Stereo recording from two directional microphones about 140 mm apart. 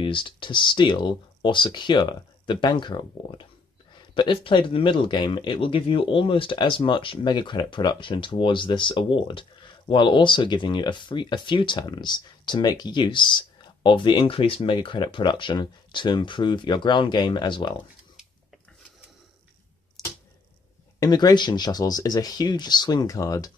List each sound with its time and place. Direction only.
0.0 s speech: 35° left (ahead or behind)
20.0 s arrow: centre (ahead or behind)
21.0 s speech: 30° left (ahead or behind)